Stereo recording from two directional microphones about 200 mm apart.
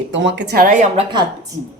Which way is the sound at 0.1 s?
65° right (ahead or behind).